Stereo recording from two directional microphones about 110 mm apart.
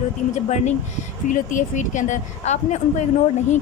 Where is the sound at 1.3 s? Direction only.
90° left.